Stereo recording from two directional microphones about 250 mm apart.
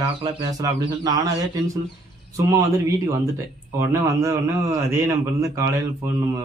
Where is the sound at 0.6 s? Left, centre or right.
Centre.